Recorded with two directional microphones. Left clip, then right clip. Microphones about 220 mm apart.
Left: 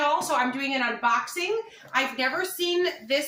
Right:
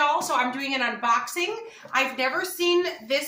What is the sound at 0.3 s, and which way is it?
A woman's voice, 15° right (ahead or behind).